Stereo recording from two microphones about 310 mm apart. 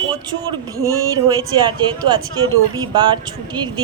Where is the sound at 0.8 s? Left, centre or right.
Centre.